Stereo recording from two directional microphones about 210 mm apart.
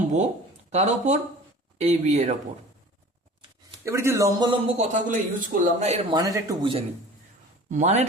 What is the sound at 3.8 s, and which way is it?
Speech, 15° right (ahead or behind).